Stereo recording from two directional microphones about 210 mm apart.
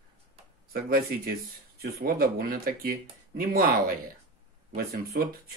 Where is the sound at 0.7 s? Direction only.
45° right (ahead or behind).